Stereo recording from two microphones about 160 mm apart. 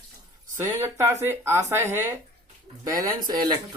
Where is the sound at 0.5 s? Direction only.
15° right (ahead or behind).